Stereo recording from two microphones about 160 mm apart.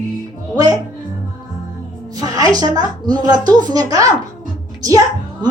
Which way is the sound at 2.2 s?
25° right (ahead or behind).